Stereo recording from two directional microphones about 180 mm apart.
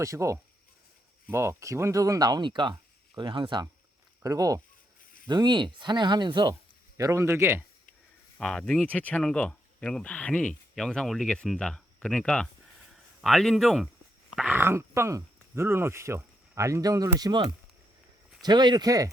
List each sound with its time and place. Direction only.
0.0 s speech: 15° right (ahead or behind)
8.4 s speech: 5° left (ahead or behind); by 19.1 s 20° right (ahead or behind)